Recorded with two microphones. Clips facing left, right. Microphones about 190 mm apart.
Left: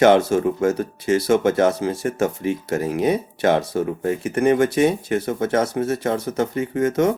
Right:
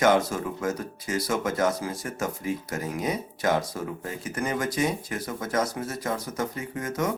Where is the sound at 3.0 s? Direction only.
30° left (ahead or behind).